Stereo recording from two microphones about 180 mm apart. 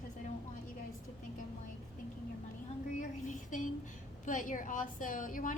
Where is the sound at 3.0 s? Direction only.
45° left (ahead or behind).